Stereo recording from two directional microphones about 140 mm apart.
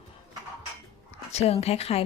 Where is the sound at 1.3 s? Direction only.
45° left (ahead or behind).